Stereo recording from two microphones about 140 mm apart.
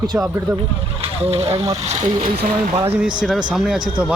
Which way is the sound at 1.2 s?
50° right (ahead or behind).